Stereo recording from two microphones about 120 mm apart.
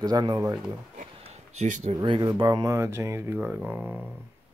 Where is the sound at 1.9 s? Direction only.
40° right (ahead or behind); by 4.1 s 15° right (ahead or behind).